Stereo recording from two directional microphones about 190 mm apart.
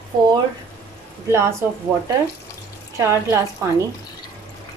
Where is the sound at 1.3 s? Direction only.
15° right (ahead or behind).